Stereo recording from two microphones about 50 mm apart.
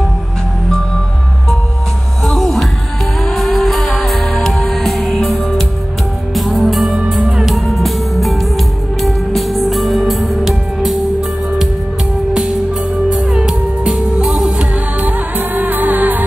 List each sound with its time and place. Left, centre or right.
2.2 s music: centre
13.1 s music: centre
15.0 s music: right